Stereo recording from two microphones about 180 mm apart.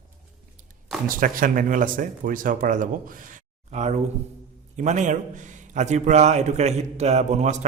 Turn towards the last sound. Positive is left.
turn(degrees=-40)  # may be behind; listen again after turning